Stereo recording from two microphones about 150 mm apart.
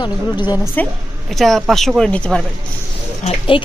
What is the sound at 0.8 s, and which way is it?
Speech, 10° left (ahead or behind).